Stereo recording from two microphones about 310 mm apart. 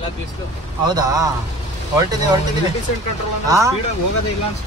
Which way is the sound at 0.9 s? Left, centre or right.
Centre.